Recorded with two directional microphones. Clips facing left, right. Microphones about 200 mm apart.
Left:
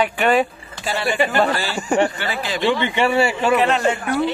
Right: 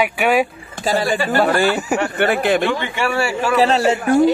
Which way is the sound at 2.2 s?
60° right (ahead or behind).